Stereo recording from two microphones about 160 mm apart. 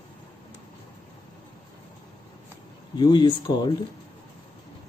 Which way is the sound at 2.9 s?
25° left (ahead or behind).